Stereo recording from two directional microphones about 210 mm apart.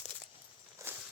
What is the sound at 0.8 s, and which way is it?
Walk, 15° right (ahead or behind).